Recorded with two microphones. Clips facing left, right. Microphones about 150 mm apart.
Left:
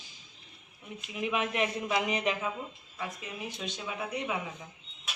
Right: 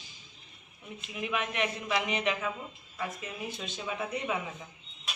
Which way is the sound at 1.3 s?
30° left (ahead or behind).